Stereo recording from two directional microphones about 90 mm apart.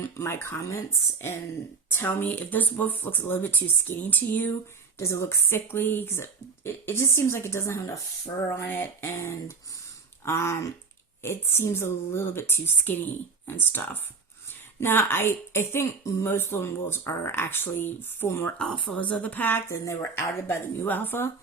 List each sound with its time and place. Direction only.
0.0 s a woman's voice: 30° left (ahead or behind)
1.9 s a woman's voice: 25° left (ahead or behind)
4.9 s a woman's voice: 30° left (ahead or behind)
8.4 s a woman's voice: 20° left (ahead or behind)
18.5 s a woman's voice: 10° left (ahead or behind)